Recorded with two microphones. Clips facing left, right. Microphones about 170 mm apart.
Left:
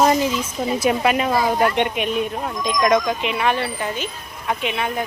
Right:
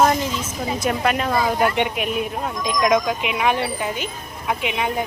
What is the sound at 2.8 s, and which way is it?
Speech, 10° right (ahead or behind).